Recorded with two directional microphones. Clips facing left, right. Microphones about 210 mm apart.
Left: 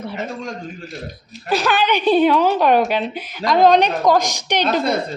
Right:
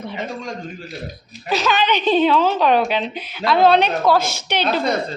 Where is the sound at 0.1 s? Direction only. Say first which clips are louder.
Left 1 dB; 5° left (ahead or behind).